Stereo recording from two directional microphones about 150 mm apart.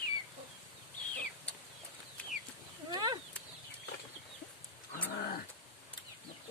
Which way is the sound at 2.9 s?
25° right (ahead or behind).